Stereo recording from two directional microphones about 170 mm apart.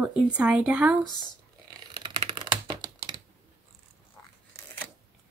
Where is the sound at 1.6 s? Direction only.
25° right (ahead or behind).